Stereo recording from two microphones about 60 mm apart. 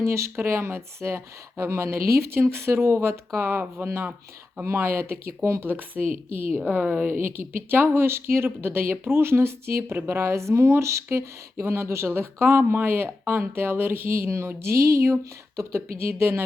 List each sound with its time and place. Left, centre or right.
0.0 s speech: right
5.6 s speech: right
16.0 s speech: right